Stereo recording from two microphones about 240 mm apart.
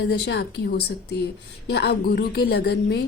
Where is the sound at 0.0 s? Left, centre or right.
Left.